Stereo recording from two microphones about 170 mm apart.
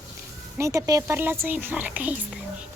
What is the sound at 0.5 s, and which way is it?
A woman's voice, 20° right (ahead or behind).